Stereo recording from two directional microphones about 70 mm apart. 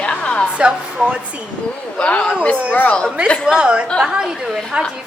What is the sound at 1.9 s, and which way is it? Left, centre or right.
A woman's voice, centre.